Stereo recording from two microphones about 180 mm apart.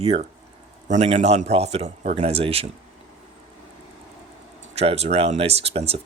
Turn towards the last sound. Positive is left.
turn(degrees=-35)  # may be behind; listen again after turning